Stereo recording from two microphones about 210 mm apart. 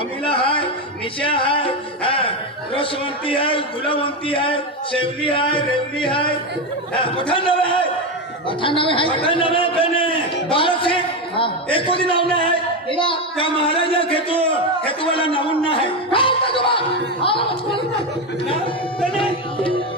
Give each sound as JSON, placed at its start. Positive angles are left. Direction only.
{"t": 0.3, "sound": "music", "side_deg": 25}
{"t": 3.2, "sound": "speech", "side_deg": 25}
{"t": 6.9, "sound": "speech", "side_deg": 25}
{"t": 19.1, "sound": "speech", "side_deg": 25}